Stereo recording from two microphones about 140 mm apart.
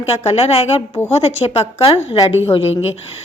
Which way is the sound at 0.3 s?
45° left (ahead or behind).